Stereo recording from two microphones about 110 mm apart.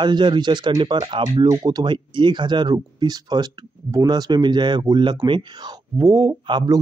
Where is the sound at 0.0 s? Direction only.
45° right (ahead or behind).